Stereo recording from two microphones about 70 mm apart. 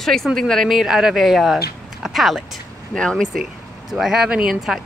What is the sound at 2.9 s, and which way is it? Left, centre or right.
Speech, centre.